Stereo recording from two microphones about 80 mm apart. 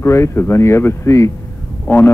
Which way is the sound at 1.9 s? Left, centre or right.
Left.